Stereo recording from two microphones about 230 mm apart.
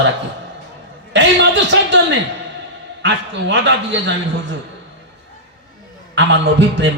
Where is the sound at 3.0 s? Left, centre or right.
Right.